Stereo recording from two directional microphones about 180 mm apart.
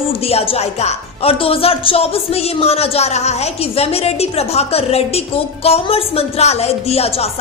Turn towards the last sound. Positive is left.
turn(degrees=35)  # may be behind; listen again after turning